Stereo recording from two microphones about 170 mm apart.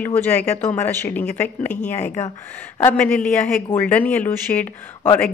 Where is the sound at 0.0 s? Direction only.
10° left (ahead or behind).